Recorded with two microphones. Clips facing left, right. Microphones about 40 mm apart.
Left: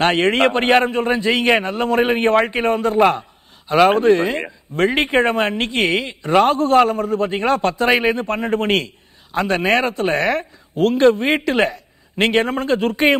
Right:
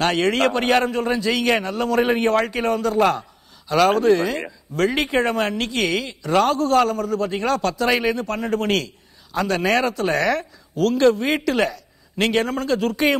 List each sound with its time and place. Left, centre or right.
0.0 s a man's voice: left